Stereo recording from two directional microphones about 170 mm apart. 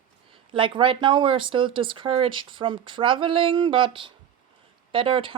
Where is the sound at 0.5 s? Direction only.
30° right (ahead or behind).